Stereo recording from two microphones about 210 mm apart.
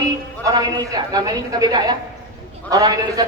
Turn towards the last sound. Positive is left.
turn(degrees=-15)  # may be behind; listen again after turning